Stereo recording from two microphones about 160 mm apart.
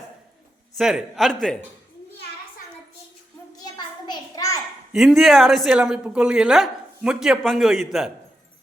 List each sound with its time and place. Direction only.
0.8 s a woman's voice: 5° right (ahead or behind)
3.6 s a sound: 25° left (ahead or behind)
4.9 s a woman's voice: 5° right (ahead or behind)